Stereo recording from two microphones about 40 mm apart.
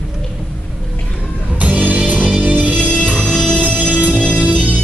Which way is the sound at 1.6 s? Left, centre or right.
Right.